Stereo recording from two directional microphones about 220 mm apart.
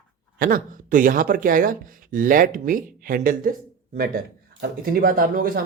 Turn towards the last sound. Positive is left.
turn(degrees=-40)  # may be behind; listen again after turning